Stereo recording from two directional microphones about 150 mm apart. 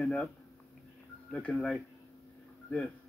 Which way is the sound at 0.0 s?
5° left (ahead or behind).